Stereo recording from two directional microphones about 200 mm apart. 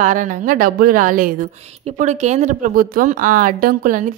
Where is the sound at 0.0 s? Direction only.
40° right (ahead or behind).